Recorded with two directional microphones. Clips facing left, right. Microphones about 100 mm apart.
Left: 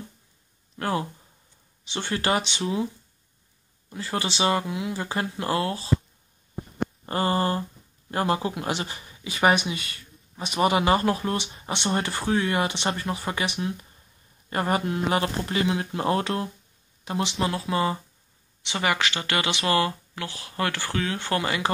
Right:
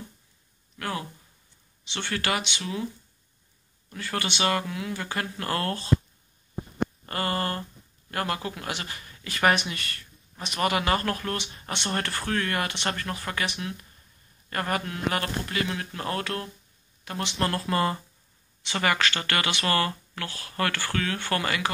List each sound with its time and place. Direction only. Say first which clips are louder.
0.7 s speech: left 5 dB; 30° left (ahead or behind)
2.0 s speech: left 4 dB; 30° left (ahead or behind)
3.9 s speech: left 2 dB; 25° left (ahead or behind)
5.5 s speech: left 3 dB; 5° left (ahead or behind)
7.1 s speech: left 7 dB; 20° left (ahead or behind)
17.4 s speech: right 1 dB; centre (ahead or behind); by 21.7 s 25° left (ahead or behind)